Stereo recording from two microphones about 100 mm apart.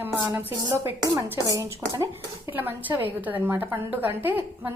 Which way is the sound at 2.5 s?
20° right (ahead or behind).